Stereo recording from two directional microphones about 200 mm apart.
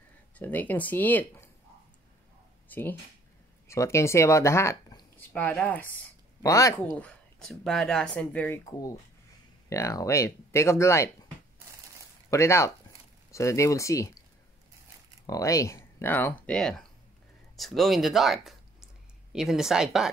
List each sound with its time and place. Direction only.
0.4 s speech: 10° left (ahead or behind)
2.7 s speech: 10° left (ahead or behind)
7.0 s speech: 5° left (ahead or behind)
9.7 s speech: 15° left (ahead or behind)
12.3 s speech: 15° left (ahead or behind)
15.2 s speech: 15° left (ahead or behind); by 20.1 s 5° right (ahead or behind)